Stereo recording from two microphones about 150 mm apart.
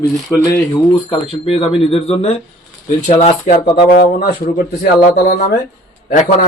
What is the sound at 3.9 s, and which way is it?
Speech, 90° left.